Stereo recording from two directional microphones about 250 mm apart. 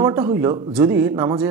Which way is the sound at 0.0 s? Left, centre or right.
Centre.